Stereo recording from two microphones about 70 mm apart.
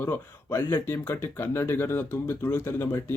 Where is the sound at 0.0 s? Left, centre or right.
Left.